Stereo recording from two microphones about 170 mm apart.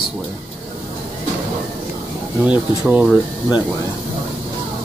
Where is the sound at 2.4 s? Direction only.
5° right (ahead or behind).